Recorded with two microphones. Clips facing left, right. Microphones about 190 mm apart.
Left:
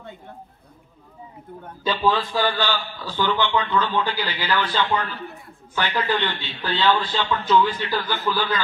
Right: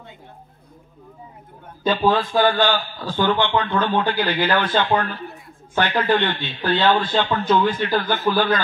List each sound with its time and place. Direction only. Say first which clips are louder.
1.9 s a man's voice: right 3 dB; 50° right (ahead or behind)